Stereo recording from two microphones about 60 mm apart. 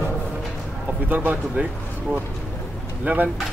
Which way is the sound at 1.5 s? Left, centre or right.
Centre.